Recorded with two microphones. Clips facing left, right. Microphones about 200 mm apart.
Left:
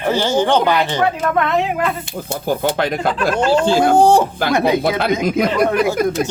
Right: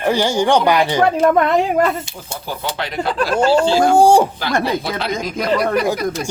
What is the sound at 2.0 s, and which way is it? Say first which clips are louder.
Speech: left 8 dB; 55° left (ahead or behind).